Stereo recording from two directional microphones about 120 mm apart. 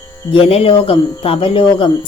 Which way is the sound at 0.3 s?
55° left (ahead or behind).